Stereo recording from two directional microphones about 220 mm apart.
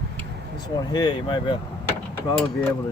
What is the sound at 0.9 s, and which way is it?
Speech, 20° left (ahead or behind).